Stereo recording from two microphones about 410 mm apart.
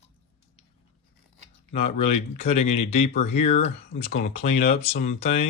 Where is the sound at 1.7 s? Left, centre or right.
Centre.